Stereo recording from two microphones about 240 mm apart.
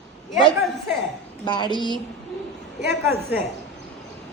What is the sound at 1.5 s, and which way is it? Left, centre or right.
Speech, centre.